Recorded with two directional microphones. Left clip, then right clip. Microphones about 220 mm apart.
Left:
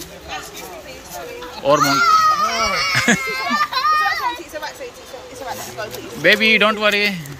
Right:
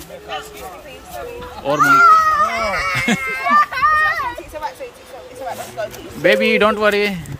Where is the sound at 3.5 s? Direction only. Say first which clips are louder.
Right 5 dB; 20° right (ahead or behind).